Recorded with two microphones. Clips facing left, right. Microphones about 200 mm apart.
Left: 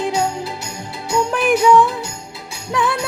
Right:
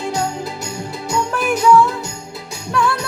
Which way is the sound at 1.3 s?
15° left (ahead or behind).